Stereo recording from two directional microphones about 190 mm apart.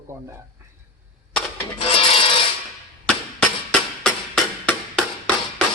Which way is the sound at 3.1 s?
5° left (ahead or behind).